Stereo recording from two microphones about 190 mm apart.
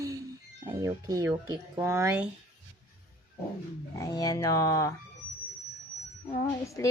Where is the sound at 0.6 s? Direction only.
15° right (ahead or behind).